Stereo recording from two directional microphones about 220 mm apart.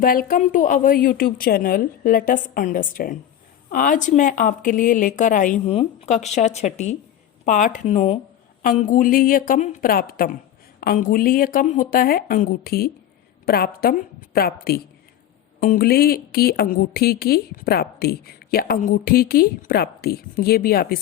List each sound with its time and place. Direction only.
0.0 s speech: 40° left (ahead or behind)